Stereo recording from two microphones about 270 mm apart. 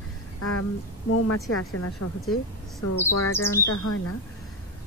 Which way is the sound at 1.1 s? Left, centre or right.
Left.